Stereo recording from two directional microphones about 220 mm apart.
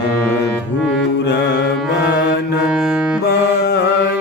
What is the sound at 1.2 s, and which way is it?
Music, 50° left (ahead or behind).